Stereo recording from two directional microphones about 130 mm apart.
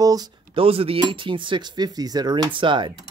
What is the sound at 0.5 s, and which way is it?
Speech, 45° right (ahead or behind).